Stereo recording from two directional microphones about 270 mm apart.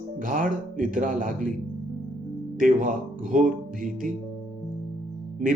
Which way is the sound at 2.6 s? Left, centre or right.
Right.